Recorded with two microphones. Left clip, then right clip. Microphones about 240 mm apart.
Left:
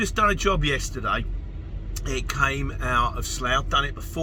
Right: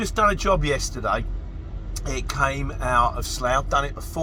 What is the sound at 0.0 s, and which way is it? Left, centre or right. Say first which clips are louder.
A man's voice: right 1 dB; right.